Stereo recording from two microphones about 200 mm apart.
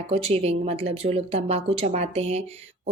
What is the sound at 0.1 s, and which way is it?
A woman's voice, 30° right (ahead or behind).